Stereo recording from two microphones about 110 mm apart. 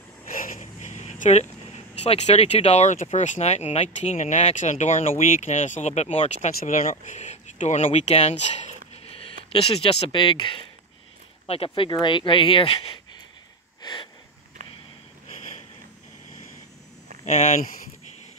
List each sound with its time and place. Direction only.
0.6 s a sound: 90° left
2.0 s speech: 80° left; by 10.1 s 60° left (ahead or behind)
10.1 s speech: 50° left (ahead or behind)
11.4 s speech: 60° left (ahead or behind)
15.2 s a sound: 90° left
17.2 s speech: 90° left